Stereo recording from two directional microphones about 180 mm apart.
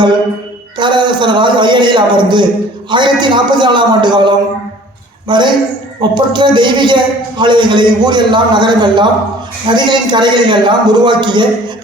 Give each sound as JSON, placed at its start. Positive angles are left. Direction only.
{"t": 0.8, "sound": "a man's voice", "side_deg": -25}